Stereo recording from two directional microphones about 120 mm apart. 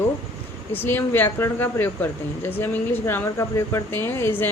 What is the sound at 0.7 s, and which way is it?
Speech, 15° left (ahead or behind).